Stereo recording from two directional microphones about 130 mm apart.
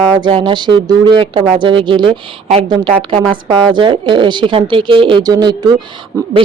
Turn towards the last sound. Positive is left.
turn(degrees=-25)  # may be behind; listen again after turning